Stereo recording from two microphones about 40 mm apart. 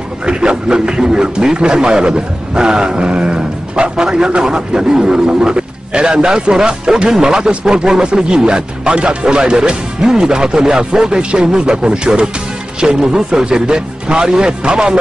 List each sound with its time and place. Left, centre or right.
0.3 s a man's voice: right